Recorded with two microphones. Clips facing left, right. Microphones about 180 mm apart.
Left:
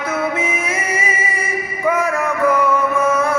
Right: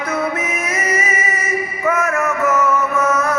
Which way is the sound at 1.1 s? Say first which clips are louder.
Right 1 dB; 30° left (ahead or behind).